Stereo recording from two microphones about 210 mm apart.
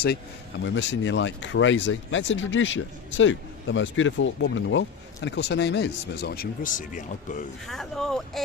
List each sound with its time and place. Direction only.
0.6 s speech: 60° left (ahead or behind); by 7.4 s 35° left (ahead or behind)
7.7 s speech: centre (ahead or behind)